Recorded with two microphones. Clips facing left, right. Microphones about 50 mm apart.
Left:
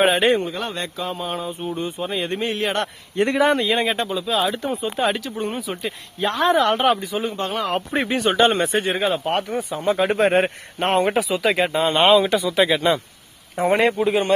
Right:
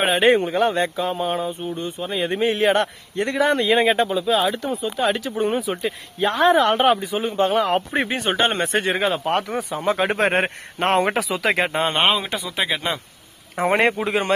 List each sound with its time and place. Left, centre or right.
0.3 s speech: right
1.0 s speech: centre
1.7 s speech: centre
2.2 s speech: centre
3.3 s speech: centre
4.7 s speech: left
5.0 s speech: centre
5.8 s speech: centre
8.0 s speech: right
8.8 s speech: right
9.9 s speech: right
12.3 s speech: centre
13.6 s speech: right